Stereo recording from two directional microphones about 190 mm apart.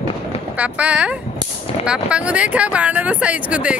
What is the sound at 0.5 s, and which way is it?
Speech, 5° right (ahead or behind).